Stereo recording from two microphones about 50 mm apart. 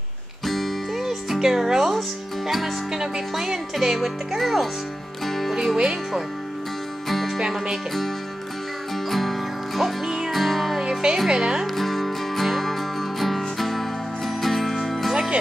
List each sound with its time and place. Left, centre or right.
0.5 s music: centre
1.0 s music: centre
2.0 s speech: centre
5.2 s music: centre
5.8 s speech: centre
7.1 s music: centre
7.3 s speech: centre
9.1 s music: centre
10.0 s music: centre
10.3 s music: centre
10.8 s music: centre
11.2 s speech: centre
11.6 s music: centre